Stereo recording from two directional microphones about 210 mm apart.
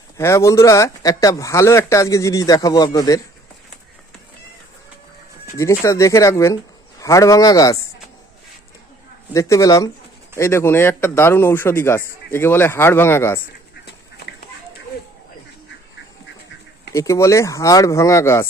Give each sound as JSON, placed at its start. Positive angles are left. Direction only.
{"t": 0.2, "sound": "speech", "side_deg": 15}
{"t": 5.5, "sound": "speech", "side_deg": 15}
{"t": 9.3, "sound": "speech", "side_deg": 15}
{"t": 16.9, "sound": "speech", "side_deg": 15}